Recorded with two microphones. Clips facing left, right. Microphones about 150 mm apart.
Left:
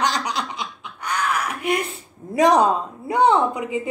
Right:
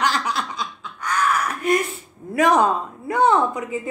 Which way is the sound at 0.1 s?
15° left (ahead or behind).